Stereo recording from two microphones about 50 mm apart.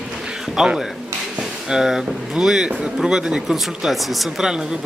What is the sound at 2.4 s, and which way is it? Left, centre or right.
Speech, centre.